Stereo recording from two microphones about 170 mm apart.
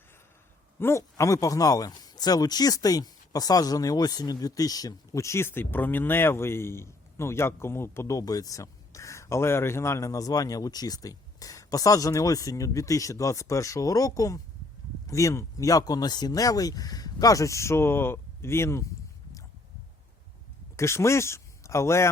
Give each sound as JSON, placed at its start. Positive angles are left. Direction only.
{"t": 0.8, "sound": "speech", "side_deg": 15}
{"t": 20.7, "sound": "speech", "side_deg": 15}